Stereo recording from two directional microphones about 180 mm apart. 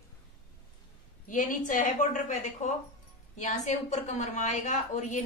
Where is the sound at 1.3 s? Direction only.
45° left (ahead or behind).